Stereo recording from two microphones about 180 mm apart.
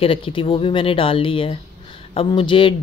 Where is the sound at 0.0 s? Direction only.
30° left (ahead or behind).